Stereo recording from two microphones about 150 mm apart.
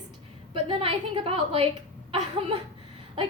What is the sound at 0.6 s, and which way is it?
A woman's voice, 40° right (ahead or behind).